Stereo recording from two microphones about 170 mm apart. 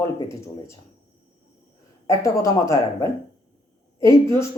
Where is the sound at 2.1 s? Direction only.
20° left (ahead or behind).